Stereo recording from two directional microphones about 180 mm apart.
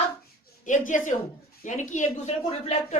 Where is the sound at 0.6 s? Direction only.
45° left (ahead or behind).